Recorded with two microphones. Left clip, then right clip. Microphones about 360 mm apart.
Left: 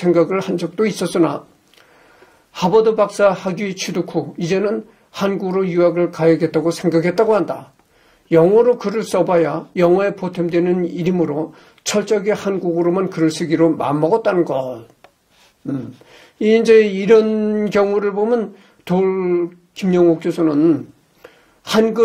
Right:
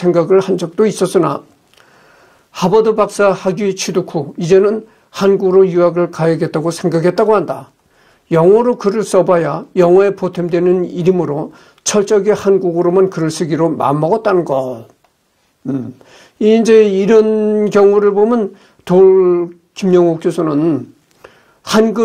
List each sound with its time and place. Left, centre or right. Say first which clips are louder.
0.0 s a man's voice: right 4 dB; right
2.5 s a man's voice: right 2 dB; right
11.8 s speech: right 5 dB; centre
16.3 s speech: right 3 dB; centre
21.2 s a sound: right 4 dB; centre